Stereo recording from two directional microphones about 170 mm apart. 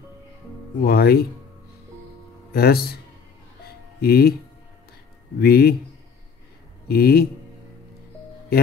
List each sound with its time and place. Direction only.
0.8 s speech: 70° left (ahead or behind)
2.5 s speech: 65° left (ahead or behind)
4.0 s speech: 65° left (ahead or behind)
5.4 s speech: 65° left (ahead or behind)
6.9 s speech: 65° left (ahead or behind)